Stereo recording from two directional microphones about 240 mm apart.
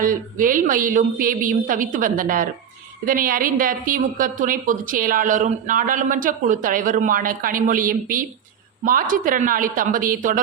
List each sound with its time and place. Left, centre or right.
0.0 s a woman's voice: right